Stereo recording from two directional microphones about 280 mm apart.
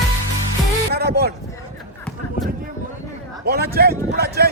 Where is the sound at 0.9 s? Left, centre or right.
Right.